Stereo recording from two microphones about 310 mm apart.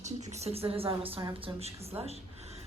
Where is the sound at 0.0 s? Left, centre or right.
Right.